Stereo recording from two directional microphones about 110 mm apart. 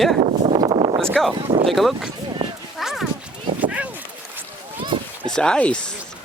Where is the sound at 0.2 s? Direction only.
85° right.